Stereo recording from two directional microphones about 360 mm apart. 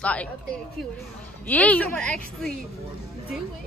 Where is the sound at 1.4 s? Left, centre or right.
Centre.